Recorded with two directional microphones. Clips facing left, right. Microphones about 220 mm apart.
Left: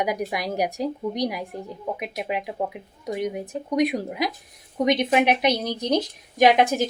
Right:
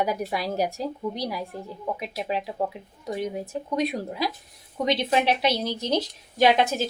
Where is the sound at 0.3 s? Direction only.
15° left (ahead or behind).